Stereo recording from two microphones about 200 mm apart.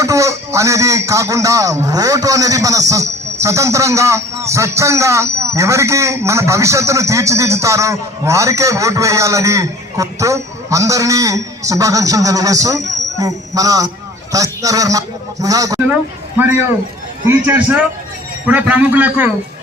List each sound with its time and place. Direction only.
0.0 s a man's voice: 15° right (ahead or behind)
17.4 s a man's voice: 10° right (ahead or behind)